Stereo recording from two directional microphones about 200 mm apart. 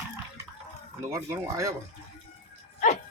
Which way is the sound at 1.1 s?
15° right (ahead or behind).